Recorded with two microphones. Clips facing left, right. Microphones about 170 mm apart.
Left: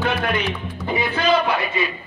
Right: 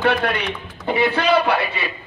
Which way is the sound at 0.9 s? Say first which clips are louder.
Right 2 dB; 65° right (ahead or behind).